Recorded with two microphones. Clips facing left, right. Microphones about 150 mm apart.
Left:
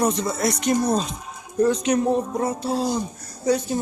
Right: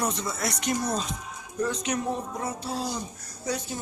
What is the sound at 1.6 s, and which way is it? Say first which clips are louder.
Speech: left 9 dB; 40° left (ahead or behind).